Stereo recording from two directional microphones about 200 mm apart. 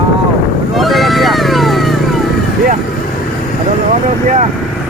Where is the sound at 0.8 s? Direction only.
Centre (ahead or behind).